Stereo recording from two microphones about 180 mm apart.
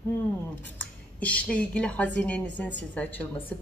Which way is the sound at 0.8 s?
10° left (ahead or behind).